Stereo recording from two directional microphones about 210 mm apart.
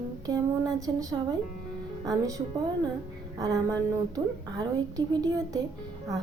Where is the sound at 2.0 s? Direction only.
15° right (ahead or behind).